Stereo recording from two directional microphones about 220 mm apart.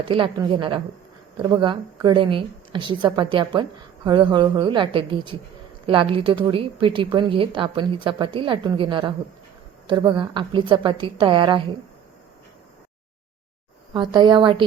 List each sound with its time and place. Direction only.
0.0 s a woman's voice: 20° right (ahead or behind)
13.9 s a woman's voice: 20° right (ahead or behind)